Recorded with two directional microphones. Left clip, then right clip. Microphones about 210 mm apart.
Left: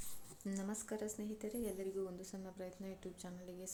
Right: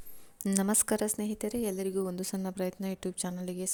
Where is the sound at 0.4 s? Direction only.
45° right (ahead or behind).